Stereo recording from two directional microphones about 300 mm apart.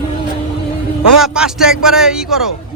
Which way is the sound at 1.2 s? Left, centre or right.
Centre.